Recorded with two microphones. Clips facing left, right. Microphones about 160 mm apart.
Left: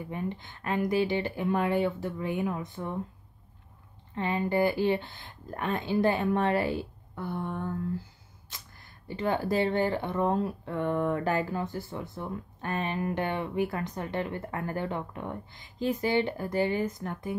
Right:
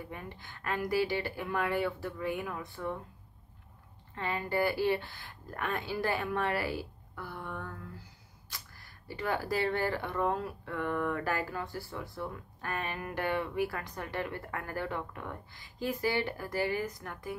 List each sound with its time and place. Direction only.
0.1 s speech: 20° left (ahead or behind)
4.1 s speech: 20° left (ahead or behind)
8.5 s a sound: 20° left (ahead or behind)
9.0 s speech: 25° left (ahead or behind)